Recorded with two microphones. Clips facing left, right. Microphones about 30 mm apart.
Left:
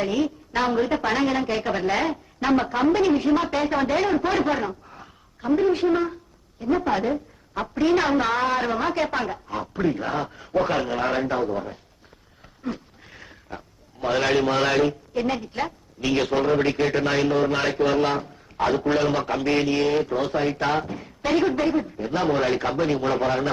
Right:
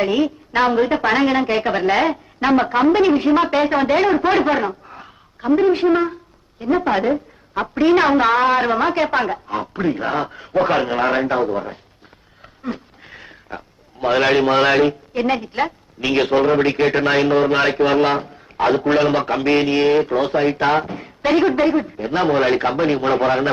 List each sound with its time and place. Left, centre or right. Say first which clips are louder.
0.0 s a man's voice: right 6 dB; right
12.6 s a sound: right 4 dB; right
14.0 s a man's voice: right 6 dB; right